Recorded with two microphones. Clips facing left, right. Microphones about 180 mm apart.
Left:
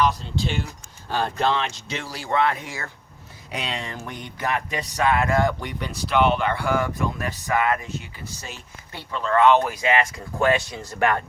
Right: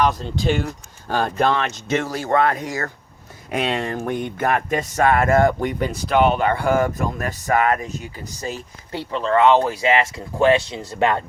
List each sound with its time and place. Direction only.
0.0 s speech: 50° right (ahead or behind)
9.1 s speech: 25° right (ahead or behind)